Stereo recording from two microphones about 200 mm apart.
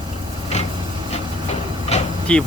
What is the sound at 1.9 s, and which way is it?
Vehicle, 35° left (ahead or behind).